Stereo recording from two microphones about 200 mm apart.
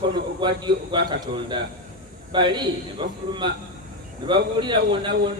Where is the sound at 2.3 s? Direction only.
25° right (ahead or behind).